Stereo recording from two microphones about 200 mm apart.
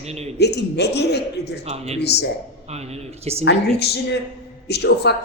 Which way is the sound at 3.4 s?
60° left (ahead or behind).